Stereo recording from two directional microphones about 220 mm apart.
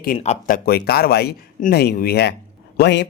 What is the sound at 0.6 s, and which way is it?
Speech, 45° left (ahead or behind).